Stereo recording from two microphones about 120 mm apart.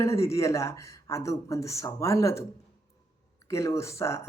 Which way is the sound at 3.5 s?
25° left (ahead or behind).